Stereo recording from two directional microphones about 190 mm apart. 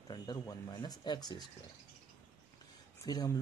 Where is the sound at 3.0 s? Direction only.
20° left (ahead or behind).